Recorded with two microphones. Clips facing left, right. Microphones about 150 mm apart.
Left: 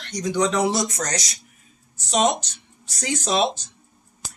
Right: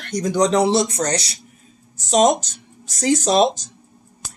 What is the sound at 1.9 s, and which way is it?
Speech, 40° right (ahead or behind).